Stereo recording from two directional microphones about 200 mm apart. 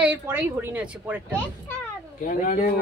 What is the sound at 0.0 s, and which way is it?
Speech, 10° right (ahead or behind).